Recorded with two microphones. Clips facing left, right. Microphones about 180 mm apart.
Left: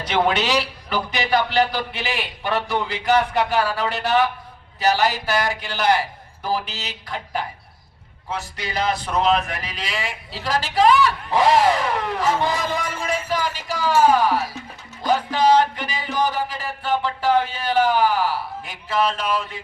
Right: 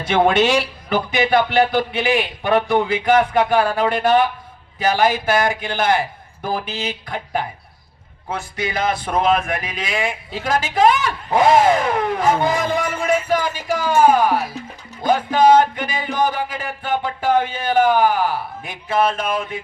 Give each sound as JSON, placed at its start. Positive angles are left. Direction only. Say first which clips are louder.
{"t": 0.0, "sound": "speech", "louder": "right 5 dB", "side_deg": -50}